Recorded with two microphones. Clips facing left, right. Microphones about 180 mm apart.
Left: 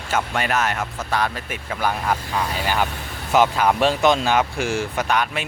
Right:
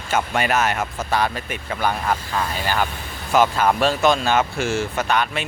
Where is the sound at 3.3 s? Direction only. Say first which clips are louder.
Even; 15° left (ahead or behind).